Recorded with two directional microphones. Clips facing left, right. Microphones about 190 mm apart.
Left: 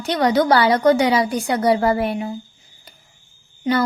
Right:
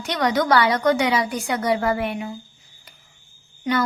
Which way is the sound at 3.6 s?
25° left (ahead or behind).